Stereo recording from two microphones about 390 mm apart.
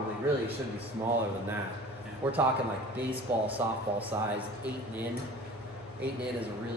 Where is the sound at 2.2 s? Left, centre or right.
Centre.